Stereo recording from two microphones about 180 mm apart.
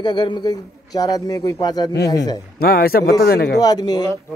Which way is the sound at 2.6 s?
60° left (ahead or behind).